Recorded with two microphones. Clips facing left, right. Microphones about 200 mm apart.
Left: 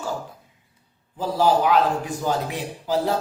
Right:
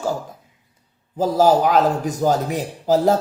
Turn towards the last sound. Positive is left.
turn(degrees=-45)  # may be behind; listen again after turning